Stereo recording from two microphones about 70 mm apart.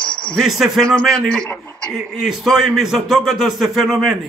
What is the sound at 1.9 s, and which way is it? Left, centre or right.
Speech, centre.